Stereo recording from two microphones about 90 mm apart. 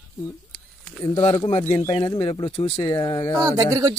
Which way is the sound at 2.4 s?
75° left (ahead or behind).